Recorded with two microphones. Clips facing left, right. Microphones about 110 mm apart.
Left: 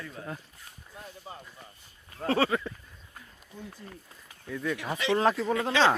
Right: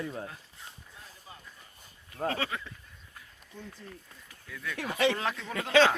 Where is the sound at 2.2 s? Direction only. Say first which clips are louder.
Left 6 dB; 35° left (ahead or behind).